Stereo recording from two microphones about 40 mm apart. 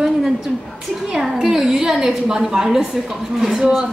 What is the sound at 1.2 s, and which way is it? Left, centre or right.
A woman's voice, centre.